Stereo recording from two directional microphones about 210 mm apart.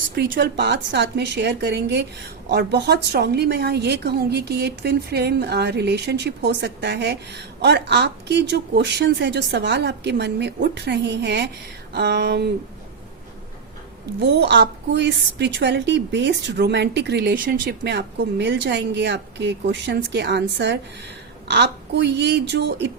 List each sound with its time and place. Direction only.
0.2 s a woman's voice: 55° right (ahead or behind)
14.2 s a woman's voice: 55° right (ahead or behind)